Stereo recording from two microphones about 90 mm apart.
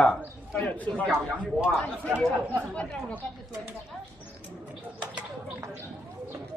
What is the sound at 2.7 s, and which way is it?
Speech, 10° left (ahead or behind).